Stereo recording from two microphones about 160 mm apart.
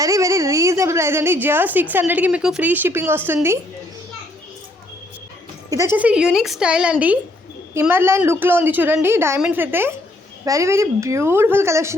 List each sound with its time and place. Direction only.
0.0 s a woman's voice: 20° right (ahead or behind)
5.7 s a woman's voice: 15° right (ahead or behind)